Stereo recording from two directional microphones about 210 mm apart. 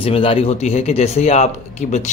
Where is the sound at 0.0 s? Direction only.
25° left (ahead or behind).